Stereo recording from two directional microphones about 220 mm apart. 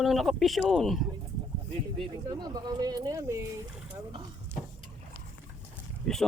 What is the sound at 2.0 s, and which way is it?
Speech, 20° right (ahead or behind).